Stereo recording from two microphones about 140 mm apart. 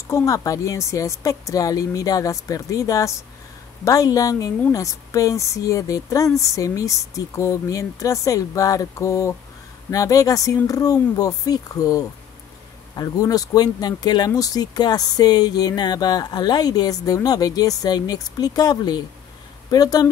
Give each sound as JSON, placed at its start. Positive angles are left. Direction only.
{"t": 0.1, "sound": "speech", "side_deg": 25}